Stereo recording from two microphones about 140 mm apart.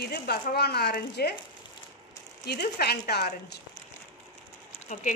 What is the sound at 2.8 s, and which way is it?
Speech, 90° left.